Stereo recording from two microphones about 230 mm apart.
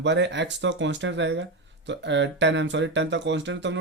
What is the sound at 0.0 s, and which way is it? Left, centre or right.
Speech, right.